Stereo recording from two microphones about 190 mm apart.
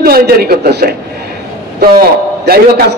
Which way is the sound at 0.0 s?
55° right (ahead or behind).